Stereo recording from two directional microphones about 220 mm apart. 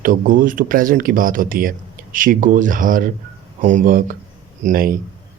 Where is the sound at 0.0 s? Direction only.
40° right (ahead or behind).